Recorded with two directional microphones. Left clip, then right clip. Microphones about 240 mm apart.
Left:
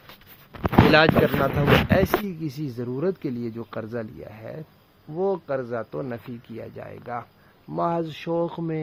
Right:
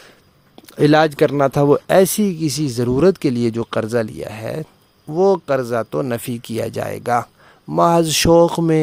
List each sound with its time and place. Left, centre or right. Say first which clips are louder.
0.9 s speech: right 6 dB; right
2.2 s speech: right 12 dB; right